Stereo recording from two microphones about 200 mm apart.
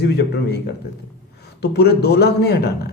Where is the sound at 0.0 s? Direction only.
55° left (ahead or behind).